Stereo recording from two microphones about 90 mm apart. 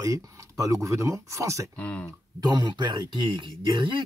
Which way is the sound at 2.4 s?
55° right (ahead or behind).